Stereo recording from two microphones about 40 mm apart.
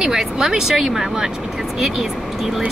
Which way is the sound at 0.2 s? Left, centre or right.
Centre.